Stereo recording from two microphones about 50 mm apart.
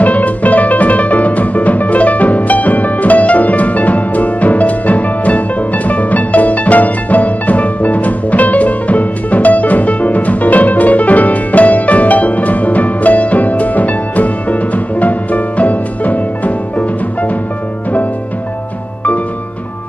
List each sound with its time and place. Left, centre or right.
0.0 s music: left